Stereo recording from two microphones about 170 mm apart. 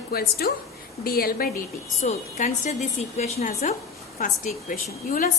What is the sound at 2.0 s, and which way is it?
A woman's voice, 40° left (ahead or behind).